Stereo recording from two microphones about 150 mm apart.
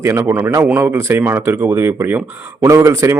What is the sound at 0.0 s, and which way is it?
A man's voice, 20° right (ahead or behind).